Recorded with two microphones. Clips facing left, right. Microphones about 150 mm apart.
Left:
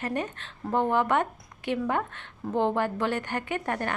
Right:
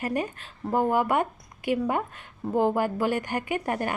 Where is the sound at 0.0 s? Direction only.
10° right (ahead or behind).